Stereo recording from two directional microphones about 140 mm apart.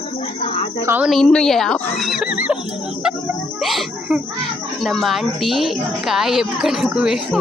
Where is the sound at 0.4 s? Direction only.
45° left (ahead or behind).